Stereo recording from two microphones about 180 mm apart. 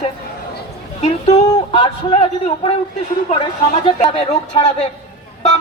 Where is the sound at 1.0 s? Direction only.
35° left (ahead or behind).